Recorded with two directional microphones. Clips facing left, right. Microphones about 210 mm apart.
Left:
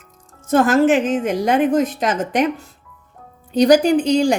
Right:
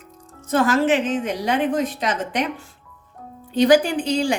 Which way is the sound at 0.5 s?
45° left (ahead or behind).